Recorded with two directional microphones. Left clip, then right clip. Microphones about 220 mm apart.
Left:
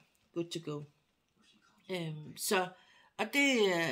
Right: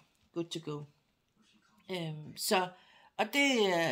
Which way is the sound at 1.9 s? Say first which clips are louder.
Even; 25° right (ahead or behind).